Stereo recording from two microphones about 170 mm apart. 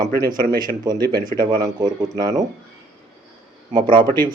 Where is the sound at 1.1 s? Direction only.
50° right (ahead or behind).